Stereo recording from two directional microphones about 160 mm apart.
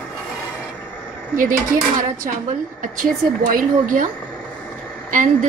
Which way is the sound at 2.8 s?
55° right (ahead or behind).